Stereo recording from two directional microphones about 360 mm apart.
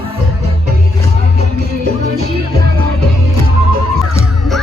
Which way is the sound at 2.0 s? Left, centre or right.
Right.